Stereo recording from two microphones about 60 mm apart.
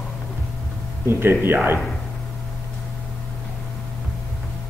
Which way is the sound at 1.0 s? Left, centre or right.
Right.